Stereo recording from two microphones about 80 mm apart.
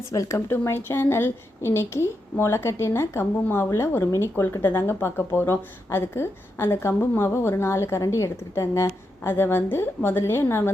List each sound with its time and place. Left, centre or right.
0.1 s a woman's voice: left